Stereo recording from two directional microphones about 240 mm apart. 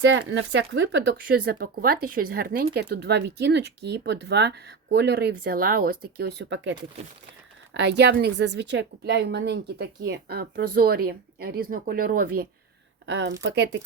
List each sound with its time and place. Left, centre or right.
0.0 s speech: right
13.1 s speech: right